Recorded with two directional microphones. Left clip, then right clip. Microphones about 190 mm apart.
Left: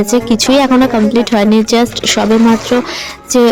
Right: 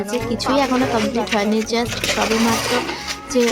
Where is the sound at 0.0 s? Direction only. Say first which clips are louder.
Left 10 dB; 45° left (ahead or behind).